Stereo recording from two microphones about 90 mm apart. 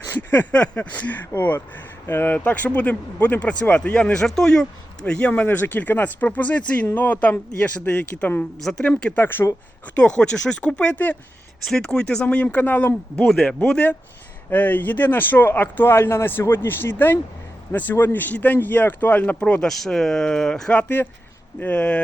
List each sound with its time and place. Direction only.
0.0 s speech: 25° left (ahead or behind)
9.2 s speech: 25° left (ahead or behind)
9.9 s speech: 10° left (ahead or behind)
11.6 s speech: 5° left (ahead or behind)
13.2 s speech: 5° left (ahead or behind)